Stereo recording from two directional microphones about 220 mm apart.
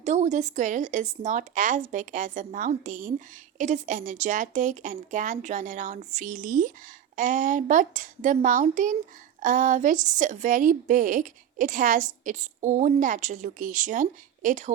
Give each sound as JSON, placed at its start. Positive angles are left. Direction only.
{"t": 0.0, "sound": "a woman's voice", "side_deg": -30}